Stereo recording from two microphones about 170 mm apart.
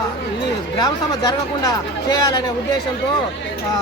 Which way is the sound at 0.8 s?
25° left (ahead or behind).